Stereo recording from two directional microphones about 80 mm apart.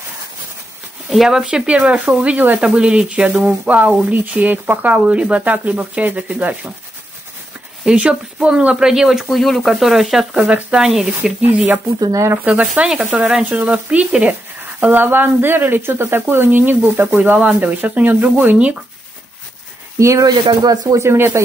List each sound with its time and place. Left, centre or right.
1.1 s speech: centre
7.8 s speech: centre
10.3 s speech: centre
12.0 s speech: right
12.4 s speech: centre
20.0 s speech: right
20.2 s speech: right
21.0 s speech: right